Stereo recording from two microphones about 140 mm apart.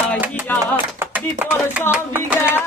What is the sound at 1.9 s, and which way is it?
Hands, 10° right (ahead or behind).